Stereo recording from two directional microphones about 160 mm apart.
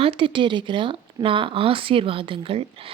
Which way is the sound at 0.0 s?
35° right (ahead or behind).